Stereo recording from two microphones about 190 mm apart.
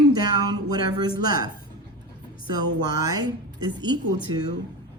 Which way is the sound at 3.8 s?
20° right (ahead or behind).